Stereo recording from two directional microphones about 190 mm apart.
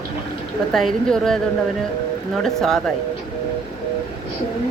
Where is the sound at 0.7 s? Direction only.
Centre (ahead or behind).